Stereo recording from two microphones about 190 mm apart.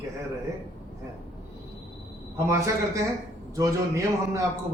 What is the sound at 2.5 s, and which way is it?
A man's voice, 15° right (ahead or behind).